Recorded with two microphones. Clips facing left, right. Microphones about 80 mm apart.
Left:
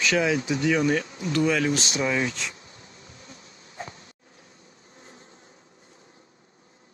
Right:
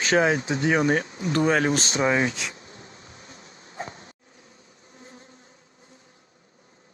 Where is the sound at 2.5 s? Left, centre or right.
Right.